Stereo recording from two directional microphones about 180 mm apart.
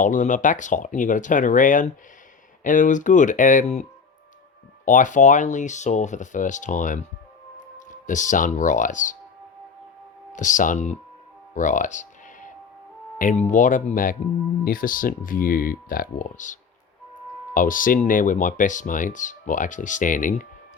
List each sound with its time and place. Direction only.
0.0 s speech: 45° left (ahead or behind)
4.9 s speech: 45° left (ahead or behind)
10.3 s speech: 45° left (ahead or behind)
11.5 s music: 45° left (ahead or behind)
13.1 s speech: 45° left (ahead or behind)